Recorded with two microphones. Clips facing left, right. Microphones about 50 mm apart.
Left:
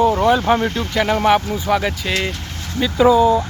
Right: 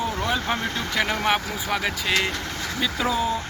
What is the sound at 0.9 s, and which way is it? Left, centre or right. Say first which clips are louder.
Speech: left 8 dB; centre.